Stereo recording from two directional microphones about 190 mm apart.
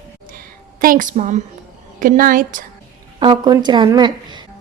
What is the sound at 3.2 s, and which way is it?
Speech, 20° right (ahead or behind).